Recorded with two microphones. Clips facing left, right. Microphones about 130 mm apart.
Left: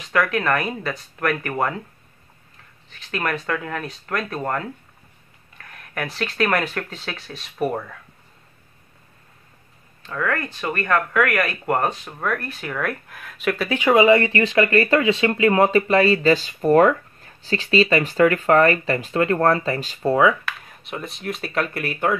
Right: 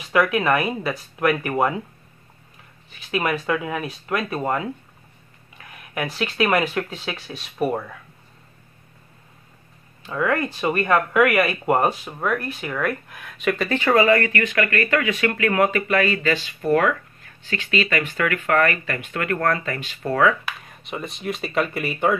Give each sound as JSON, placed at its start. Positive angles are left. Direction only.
{"t": 0.1, "sound": "speech", "side_deg": -10}
{"t": 2.9, "sound": "speech", "side_deg": -10}
{"t": 10.0, "sound": "speech", "side_deg": -15}
{"t": 20.1, "sound": "speech", "side_deg": 20}
{"t": 20.6, "sound": "speech", "side_deg": 0}